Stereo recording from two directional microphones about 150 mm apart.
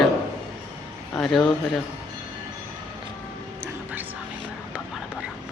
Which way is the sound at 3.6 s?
10° right (ahead or behind).